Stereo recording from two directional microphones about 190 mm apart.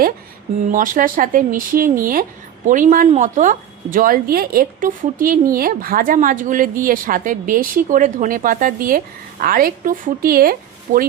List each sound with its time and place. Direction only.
0.7 s speech: 45° right (ahead or behind)